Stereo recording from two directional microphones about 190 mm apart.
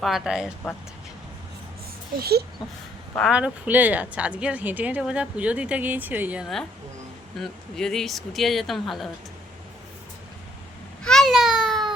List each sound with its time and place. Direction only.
0.0 s speech: centre (ahead or behind)
2.1 s a child's voice: 55° right (ahead or behind)
3.2 s speech: 5° right (ahead or behind)
7.3 s speech: centre (ahead or behind)
11.0 s a sound: centre (ahead or behind)